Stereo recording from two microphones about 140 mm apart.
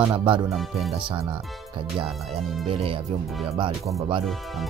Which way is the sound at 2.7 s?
40° right (ahead or behind).